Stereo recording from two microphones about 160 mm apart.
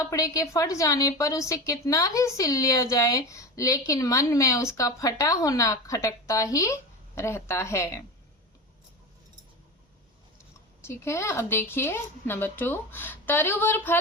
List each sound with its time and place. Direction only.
0.1 s a woman's voice: 20° left (ahead or behind)
10.8 s a woman's voice: 15° left (ahead or behind)